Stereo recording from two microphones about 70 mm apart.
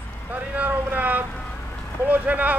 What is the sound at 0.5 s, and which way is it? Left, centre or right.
Speech, right.